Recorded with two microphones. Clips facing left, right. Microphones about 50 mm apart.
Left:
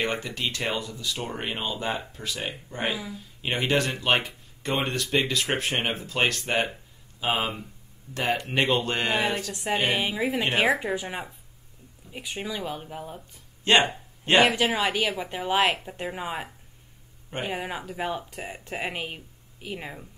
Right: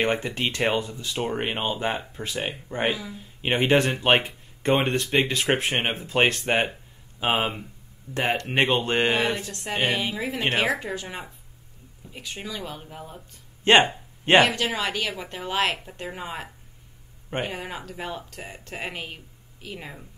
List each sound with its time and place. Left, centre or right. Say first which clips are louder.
0.0 s speech: right 4 dB; right
9.5 s speech: even; centre
13.7 s speech: right 3 dB; right
14.4 s speech: left 1 dB; centre